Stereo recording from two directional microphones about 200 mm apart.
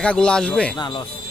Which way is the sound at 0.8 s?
20° left (ahead or behind).